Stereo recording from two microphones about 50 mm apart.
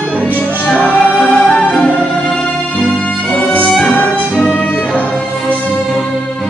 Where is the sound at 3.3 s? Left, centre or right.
Left.